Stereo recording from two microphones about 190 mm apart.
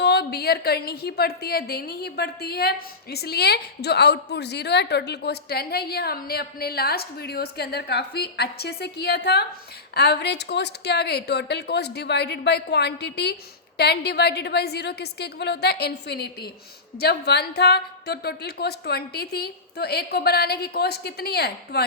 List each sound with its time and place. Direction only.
0.0 s a woman's voice: 60° left (ahead or behind)